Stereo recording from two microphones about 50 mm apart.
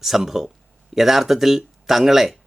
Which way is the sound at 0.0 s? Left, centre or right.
Centre.